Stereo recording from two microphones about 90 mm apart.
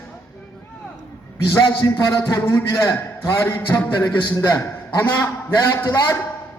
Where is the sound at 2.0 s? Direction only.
35° left (ahead or behind).